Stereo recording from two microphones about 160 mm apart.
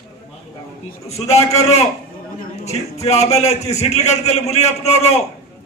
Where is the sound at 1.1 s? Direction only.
40° left (ahead or behind).